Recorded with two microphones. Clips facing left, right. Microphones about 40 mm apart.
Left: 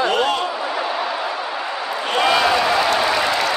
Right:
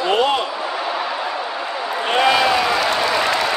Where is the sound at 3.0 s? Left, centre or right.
Centre.